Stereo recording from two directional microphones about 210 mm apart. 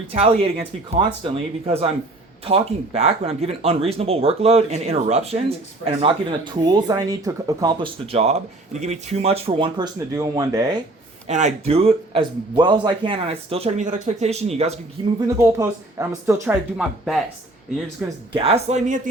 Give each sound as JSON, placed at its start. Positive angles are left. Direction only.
{"t": 0.1, "sound": "speech", "side_deg": -25}
{"t": 11.3, "sound": "speech", "side_deg": -35}
{"t": 15.2, "sound": "speech", "side_deg": -15}
{"t": 18.3, "sound": "speech", "side_deg": -30}